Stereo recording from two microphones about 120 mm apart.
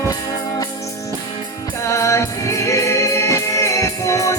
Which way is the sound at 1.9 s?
25° left (ahead or behind).